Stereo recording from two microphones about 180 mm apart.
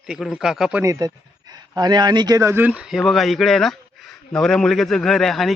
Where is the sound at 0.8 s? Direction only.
20° right (ahead or behind).